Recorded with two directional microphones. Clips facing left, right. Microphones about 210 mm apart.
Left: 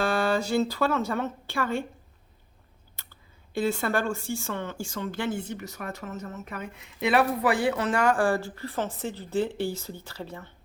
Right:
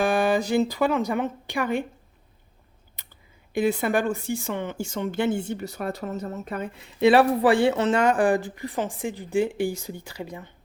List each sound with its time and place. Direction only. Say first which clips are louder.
0.0 s speech: right 3 dB; 15° right (ahead or behind)
3.5 s speech: right 4 dB; 15° right (ahead or behind)